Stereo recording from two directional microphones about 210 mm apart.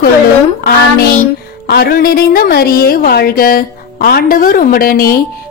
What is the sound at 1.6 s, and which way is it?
A woman's voice, 45° left (ahead or behind).